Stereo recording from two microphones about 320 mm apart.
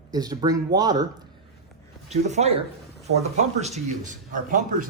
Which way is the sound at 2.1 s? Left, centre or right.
Right.